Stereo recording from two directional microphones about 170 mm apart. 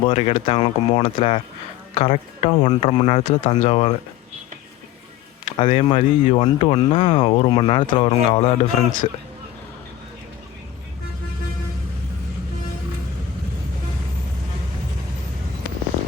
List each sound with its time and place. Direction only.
0.0 s speech: 40° left (ahead or behind)
5.5 s speech: 35° left (ahead or behind)